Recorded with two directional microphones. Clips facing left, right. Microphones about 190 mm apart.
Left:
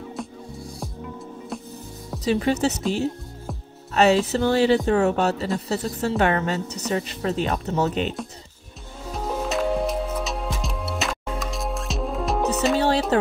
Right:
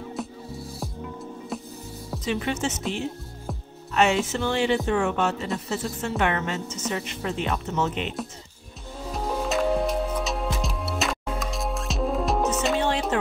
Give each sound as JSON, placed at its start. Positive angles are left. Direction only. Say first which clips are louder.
{"t": 0.0, "sound": "music", "louder": "even", "side_deg": 0}
{"t": 2.2, "sound": "speech", "louder": "left 6 dB", "side_deg": 35}
{"t": 3.9, "sound": "speech", "louder": "left 4 dB", "side_deg": 35}
{"t": 9.1, "sound": "music", "louder": "even", "side_deg": 0}
{"t": 13.1, "sound": "a sound", "louder": "left 6 dB", "side_deg": 35}